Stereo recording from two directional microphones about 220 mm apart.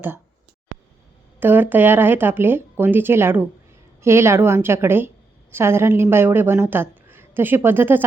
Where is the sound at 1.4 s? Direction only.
10° right (ahead or behind).